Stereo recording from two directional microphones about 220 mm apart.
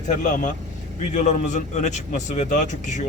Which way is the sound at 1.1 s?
35° left (ahead or behind).